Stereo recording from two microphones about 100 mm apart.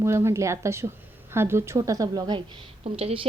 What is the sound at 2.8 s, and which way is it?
Speech, 85° right.